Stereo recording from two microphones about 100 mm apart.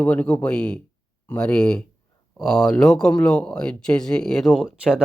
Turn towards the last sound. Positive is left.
turn(degrees=-10)  # may be behind; listen again after turning